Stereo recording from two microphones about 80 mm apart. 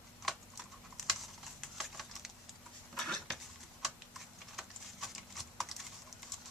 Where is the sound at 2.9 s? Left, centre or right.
Centre.